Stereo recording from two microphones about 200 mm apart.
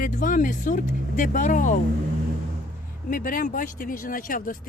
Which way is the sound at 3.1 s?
40° left (ahead or behind).